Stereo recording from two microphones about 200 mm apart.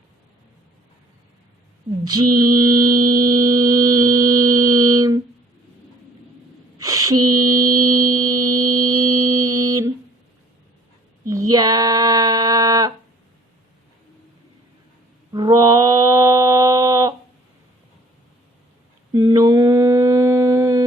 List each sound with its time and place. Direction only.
2.0 s mantra: 20° right (ahead or behind)
6.7 s mantra: 15° right (ahead or behind)
11.3 s a sound: 15° right (ahead or behind)
15.3 s mantra: 20° right (ahead or behind)
19.1 s mantra: 15° right (ahead or behind)